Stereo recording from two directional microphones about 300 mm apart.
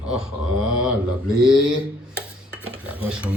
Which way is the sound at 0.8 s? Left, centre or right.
Centre.